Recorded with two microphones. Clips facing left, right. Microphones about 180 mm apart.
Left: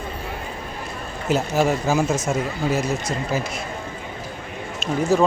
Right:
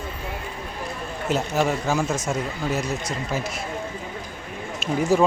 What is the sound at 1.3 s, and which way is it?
Speech, 5° left (ahead or behind).